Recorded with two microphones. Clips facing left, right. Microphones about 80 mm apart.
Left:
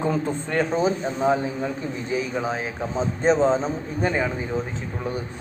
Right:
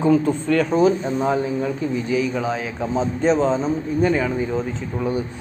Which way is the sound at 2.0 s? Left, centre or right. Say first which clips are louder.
Right 2 dB; left.